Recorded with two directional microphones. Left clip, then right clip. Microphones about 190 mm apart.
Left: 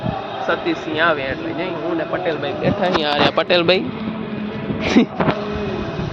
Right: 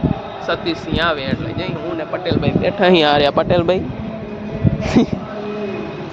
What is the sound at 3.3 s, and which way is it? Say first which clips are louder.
Speech: even; 10° right (ahead or behind).